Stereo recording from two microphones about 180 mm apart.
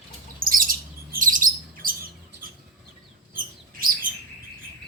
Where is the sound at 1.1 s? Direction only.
50° right (ahead or behind).